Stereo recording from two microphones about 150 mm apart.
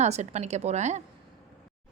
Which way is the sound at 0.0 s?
50° right (ahead or behind).